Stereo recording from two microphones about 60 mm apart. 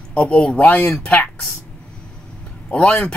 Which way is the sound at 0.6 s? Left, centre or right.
Left.